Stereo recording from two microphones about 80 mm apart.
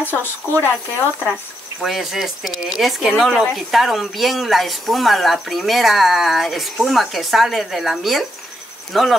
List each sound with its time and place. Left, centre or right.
0.0 s a woman's voice: left
1.8 s speech: centre